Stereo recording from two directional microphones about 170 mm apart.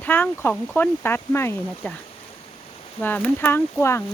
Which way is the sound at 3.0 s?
10° left (ahead or behind).